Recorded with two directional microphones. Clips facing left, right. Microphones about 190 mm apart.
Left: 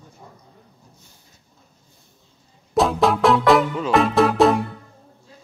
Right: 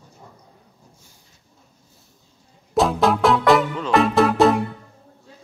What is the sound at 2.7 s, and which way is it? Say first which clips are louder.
Music: even; centre (ahead or behind).